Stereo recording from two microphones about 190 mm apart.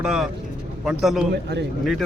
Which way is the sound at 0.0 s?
5° right (ahead or behind).